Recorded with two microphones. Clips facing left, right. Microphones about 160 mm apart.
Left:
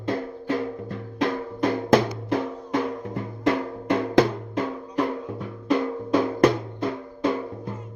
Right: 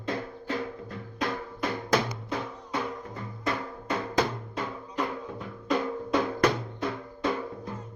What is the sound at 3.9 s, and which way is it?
Drum, 55° left (ahead or behind).